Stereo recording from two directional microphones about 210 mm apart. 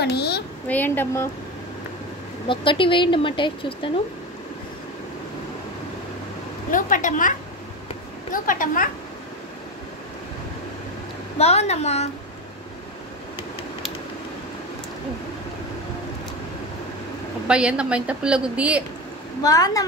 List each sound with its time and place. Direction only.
0.0 s a woman's voice: 50° left (ahead or behind)
0.7 s speech: 10° left (ahead or behind)
2.4 s speech: 25° left (ahead or behind)
6.7 s a woman's voice: 40° left (ahead or behind)
11.3 s a woman's voice: 30° left (ahead or behind)
17.5 s a woman's voice: 5° right (ahead or behind)
19.4 s speech: 15° left (ahead or behind)